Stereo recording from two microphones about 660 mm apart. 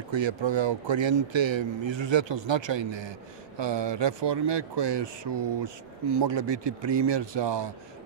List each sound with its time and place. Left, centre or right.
0.1 s speech: right